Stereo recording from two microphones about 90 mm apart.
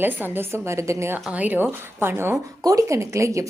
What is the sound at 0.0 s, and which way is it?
A woman's voice, 25° right (ahead or behind).